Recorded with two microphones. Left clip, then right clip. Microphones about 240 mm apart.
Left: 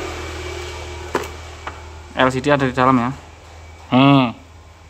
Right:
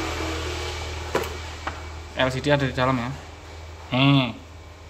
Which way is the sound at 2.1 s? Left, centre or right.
Centre.